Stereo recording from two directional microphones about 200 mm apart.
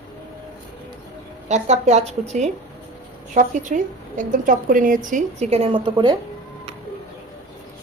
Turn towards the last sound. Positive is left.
turn(degrees=-20)  # may be behind; listen again after turning